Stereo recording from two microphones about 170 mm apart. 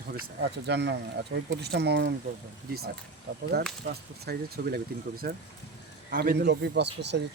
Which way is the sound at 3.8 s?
65° right (ahead or behind).